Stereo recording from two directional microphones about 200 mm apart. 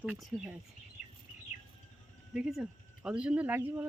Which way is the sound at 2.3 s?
5° right (ahead or behind).